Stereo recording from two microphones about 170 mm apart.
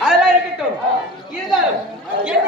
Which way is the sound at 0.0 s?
5° right (ahead or behind).